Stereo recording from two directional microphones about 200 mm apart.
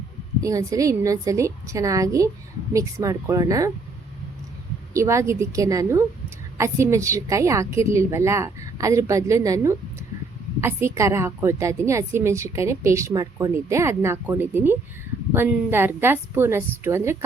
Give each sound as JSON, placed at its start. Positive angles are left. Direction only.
{"t": 0.4, "sound": "a woman's voice", "side_deg": -15}
{"t": 4.9, "sound": "a woman's voice", "side_deg": -15}